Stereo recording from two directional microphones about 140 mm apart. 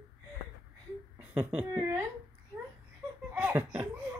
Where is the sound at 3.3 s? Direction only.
15° right (ahead or behind).